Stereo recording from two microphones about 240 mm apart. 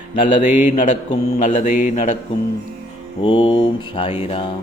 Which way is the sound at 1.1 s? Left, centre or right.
Left.